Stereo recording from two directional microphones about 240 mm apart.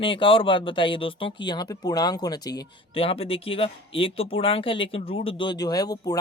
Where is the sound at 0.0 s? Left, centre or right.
Left.